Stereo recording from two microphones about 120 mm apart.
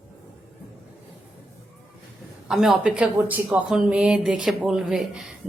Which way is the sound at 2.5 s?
Centre (ahead or behind).